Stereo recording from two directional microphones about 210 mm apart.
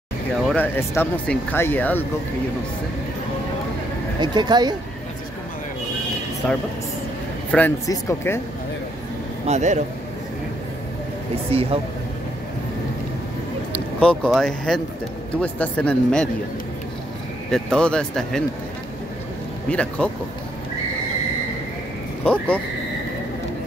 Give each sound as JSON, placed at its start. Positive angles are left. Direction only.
{"t": 0.5, "sound": "speech", "side_deg": 10}
{"t": 4.2, "sound": "speech", "side_deg": -20}
{"t": 7.5, "sound": "speech", "side_deg": 10}
{"t": 9.5, "sound": "a man's voice", "side_deg": -35}
{"t": 11.5, "sound": "speech", "side_deg": -30}
{"t": 13.9, "sound": "speech", "side_deg": 5}
{"t": 17.5, "sound": "speech", "side_deg": 5}
{"t": 19.7, "sound": "speech", "side_deg": 5}
{"t": 22.2, "sound": "speech", "side_deg": 5}